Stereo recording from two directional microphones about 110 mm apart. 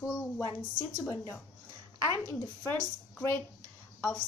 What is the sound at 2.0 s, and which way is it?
Speech, 20° left (ahead or behind).